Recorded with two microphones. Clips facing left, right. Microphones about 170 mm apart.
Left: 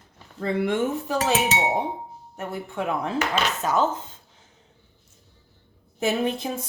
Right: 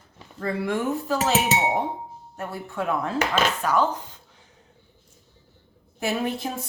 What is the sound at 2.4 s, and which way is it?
Speech, 20° left (ahead or behind).